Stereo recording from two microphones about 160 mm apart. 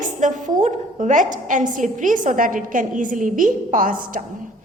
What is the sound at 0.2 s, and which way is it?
A woman's voice, 50° right (ahead or behind).